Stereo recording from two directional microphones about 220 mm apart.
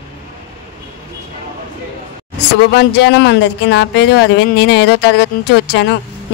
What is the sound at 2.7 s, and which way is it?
Speech, 50° left (ahead or behind).